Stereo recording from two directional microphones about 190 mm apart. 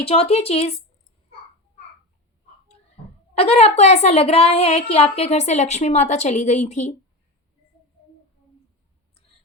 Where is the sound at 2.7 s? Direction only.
30° left (ahead or behind).